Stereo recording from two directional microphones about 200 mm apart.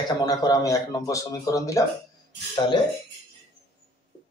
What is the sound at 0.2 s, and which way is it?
Speech, 20° left (ahead or behind).